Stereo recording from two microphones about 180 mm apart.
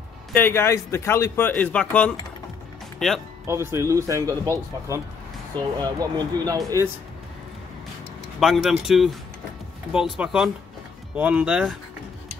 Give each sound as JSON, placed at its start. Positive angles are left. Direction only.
{"t": 0.3, "sound": "a man's voice", "side_deg": 10}
{"t": 3.4, "sound": "speech", "side_deg": -15}
{"t": 8.4, "sound": "speech", "side_deg": 0}